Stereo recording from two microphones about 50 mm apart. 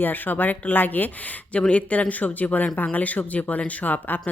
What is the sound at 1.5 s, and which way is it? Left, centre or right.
A woman's voice, left.